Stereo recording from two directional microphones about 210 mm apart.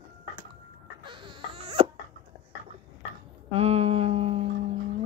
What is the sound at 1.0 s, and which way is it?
Baby cry, 25° right (ahead or behind).